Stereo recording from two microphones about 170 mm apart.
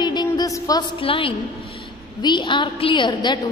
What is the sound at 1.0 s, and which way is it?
A woman's voice, 30° left (ahead or behind).